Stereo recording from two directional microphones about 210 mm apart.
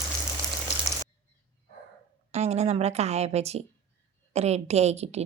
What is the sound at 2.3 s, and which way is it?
A woman's voice, 30° right (ahead or behind).